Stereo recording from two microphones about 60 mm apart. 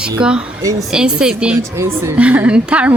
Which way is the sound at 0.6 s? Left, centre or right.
Right.